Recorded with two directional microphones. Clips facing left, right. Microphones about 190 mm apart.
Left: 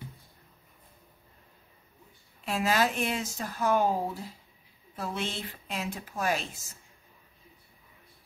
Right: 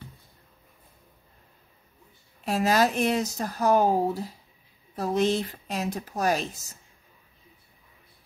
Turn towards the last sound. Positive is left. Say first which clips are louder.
# right 5 dB
turn(degrees=-40)  # may be behind; listen again after turning